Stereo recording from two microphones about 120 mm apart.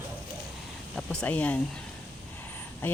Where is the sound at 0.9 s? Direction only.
5° left (ahead or behind).